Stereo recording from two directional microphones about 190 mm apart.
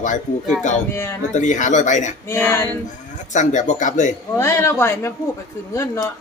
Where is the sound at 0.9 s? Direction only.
15° left (ahead or behind).